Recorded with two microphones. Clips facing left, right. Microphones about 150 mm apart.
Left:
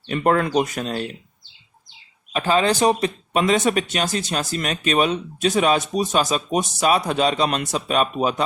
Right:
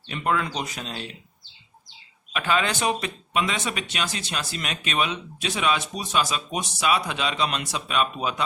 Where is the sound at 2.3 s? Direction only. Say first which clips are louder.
Left 6 dB; 35° left (ahead or behind).